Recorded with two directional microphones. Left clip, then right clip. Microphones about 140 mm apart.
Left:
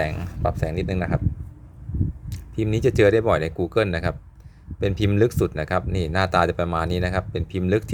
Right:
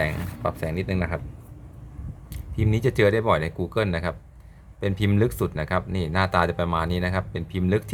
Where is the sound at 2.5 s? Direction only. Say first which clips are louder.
Left 3 dB; 30° left (ahead or behind).